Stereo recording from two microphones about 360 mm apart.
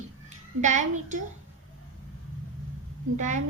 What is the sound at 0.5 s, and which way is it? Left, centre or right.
Speech, centre.